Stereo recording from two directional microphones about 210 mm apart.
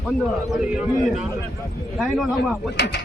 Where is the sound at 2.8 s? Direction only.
55° left (ahead or behind).